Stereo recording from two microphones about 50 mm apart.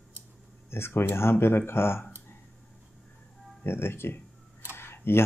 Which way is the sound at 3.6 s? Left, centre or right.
Left.